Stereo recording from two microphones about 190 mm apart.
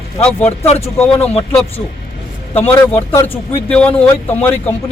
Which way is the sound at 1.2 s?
30° left (ahead or behind).